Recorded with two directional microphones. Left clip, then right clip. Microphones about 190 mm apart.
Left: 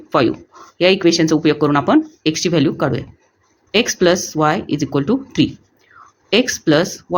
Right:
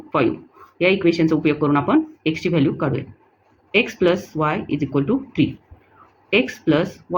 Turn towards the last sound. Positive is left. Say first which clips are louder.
# left 4 dB
turn(degrees=50)  # may be behind; listen again after turning